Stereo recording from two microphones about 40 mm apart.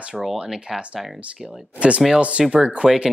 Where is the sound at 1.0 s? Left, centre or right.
Centre.